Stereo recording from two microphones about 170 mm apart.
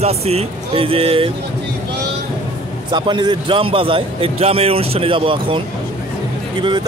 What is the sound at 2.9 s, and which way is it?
A man's voice, 25° right (ahead or behind).